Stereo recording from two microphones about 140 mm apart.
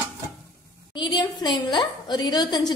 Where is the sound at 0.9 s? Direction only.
30° left (ahead or behind).